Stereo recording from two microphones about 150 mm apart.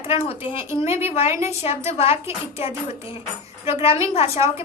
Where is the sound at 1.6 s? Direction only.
45° left (ahead or behind).